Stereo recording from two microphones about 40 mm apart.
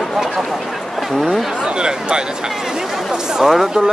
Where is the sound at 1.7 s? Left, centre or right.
Right.